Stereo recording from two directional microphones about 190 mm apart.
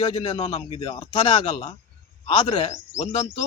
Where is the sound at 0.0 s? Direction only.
25° left (ahead or behind).